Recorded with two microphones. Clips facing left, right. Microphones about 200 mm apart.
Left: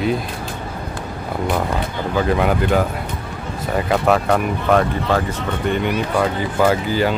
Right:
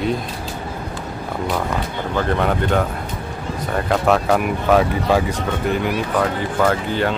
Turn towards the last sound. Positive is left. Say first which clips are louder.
# left 2 dB
turn(degrees=5)  # may be behind; listen again after turning